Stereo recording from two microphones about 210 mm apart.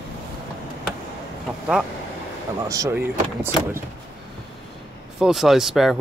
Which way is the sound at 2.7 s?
15° right (ahead or behind).